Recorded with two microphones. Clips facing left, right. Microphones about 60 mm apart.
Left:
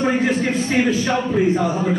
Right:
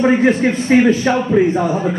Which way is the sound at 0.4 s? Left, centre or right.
Right.